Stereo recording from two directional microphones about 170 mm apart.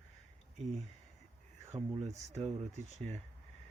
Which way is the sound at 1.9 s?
40° right (ahead or behind).